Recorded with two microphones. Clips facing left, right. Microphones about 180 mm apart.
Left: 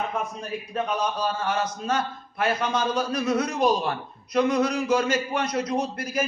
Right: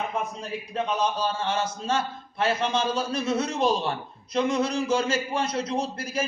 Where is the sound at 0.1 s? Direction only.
25° right (ahead or behind).